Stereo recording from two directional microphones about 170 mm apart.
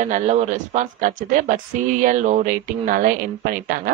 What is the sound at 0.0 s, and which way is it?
Speech, 45° right (ahead or behind).